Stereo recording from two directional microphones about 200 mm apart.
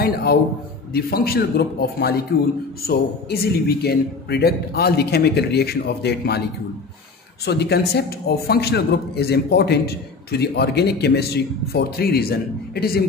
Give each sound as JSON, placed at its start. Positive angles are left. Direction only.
{"t": 0.0, "sound": "a man's voice", "side_deg": 50}
{"t": 7.4, "sound": "a man's voice", "side_deg": 55}